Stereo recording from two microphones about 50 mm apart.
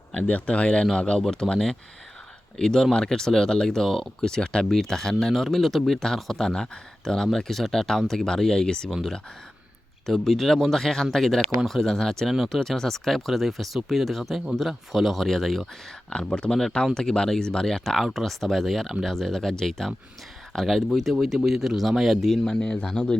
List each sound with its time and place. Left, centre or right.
0.1 s speech: left
10.1 s speech: centre
16.1 s speech: centre
22.4 s speech: centre